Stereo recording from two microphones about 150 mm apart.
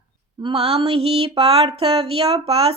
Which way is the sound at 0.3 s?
35° right (ahead or behind).